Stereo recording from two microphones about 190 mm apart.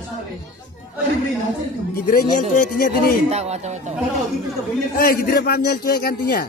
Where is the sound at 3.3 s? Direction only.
35° right (ahead or behind).